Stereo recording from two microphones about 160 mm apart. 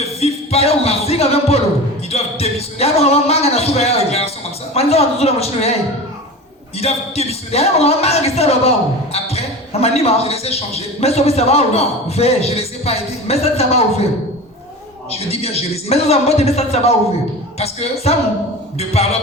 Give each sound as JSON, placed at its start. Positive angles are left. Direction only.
{"t": 0.0, "sound": "music", "side_deg": 40}
{"t": 2.0, "sound": "a man's voice", "side_deg": 40}
{"t": 6.7, "sound": "a man's voice", "side_deg": 40}
{"t": 9.1, "sound": "a sound", "side_deg": 40}
{"t": 9.8, "sound": "a man's voice", "side_deg": 40}
{"t": 15.1, "sound": "a man's voice", "side_deg": 40}